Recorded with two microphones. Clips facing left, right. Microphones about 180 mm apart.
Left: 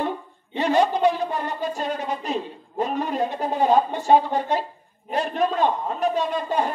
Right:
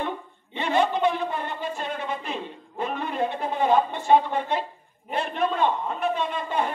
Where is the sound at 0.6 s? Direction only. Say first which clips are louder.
Left 3 dB; 40° left (ahead or behind).